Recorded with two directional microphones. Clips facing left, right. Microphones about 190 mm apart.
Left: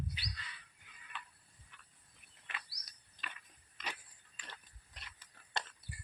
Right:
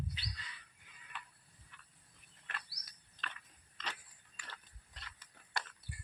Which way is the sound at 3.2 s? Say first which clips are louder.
Right 2 dB; 10° left (ahead or behind).